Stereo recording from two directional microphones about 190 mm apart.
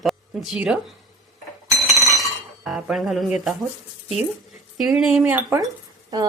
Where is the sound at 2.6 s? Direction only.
Centre (ahead or behind).